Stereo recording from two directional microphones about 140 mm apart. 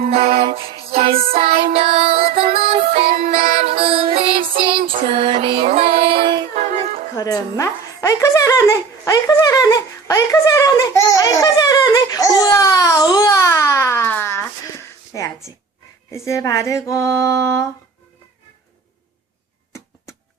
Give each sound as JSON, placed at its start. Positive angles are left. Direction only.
{"t": 0.4, "sound": "music", "side_deg": -40}
{"t": 6.6, "sound": "music", "side_deg": -55}
{"t": 7.2, "sound": "a sound", "side_deg": 25}
{"t": 16.1, "sound": "speech", "side_deg": 20}